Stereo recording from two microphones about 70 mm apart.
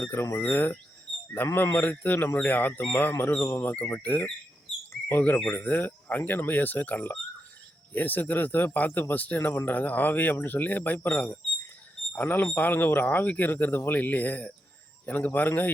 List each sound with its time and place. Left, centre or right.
0.0 s speech: left
4.0 s speech: left